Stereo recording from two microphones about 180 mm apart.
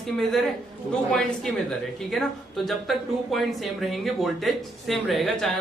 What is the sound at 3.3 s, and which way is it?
Speech, centre (ahead or behind).